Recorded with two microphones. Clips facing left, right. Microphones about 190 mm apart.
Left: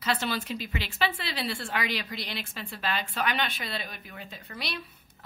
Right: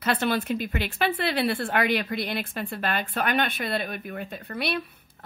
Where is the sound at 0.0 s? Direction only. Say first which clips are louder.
Right 5 dB; 55° right (ahead or behind).